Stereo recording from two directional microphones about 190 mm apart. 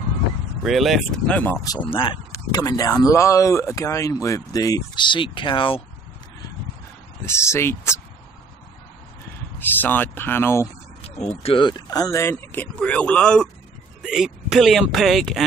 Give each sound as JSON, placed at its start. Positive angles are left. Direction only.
{"t": 0.7, "sound": "speech", "side_deg": 0}
{"t": 7.2, "sound": "speech", "side_deg": 15}
{"t": 9.6, "sound": "speech", "side_deg": 10}
{"t": 11.0, "sound": "speech", "side_deg": 35}